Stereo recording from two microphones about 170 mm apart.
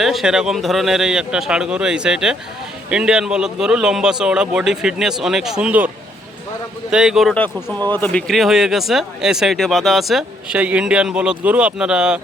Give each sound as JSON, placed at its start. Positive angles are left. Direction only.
{"t": 0.0, "sound": "speech", "side_deg": 0}
{"t": 6.9, "sound": "speech", "side_deg": -5}
{"t": 7.3, "sound": "speech", "side_deg": 10}